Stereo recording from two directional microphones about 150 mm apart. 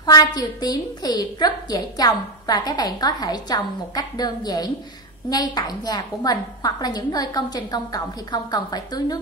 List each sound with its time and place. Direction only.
0.0 s a woman's voice: 25° left (ahead or behind)